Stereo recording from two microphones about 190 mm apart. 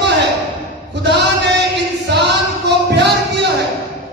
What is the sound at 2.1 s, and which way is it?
Music, 65° right (ahead or behind).